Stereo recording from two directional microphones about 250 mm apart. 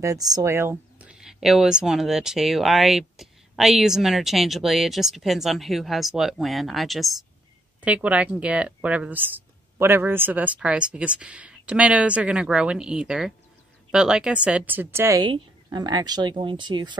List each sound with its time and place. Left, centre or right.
0.0 s a woman's voice: centre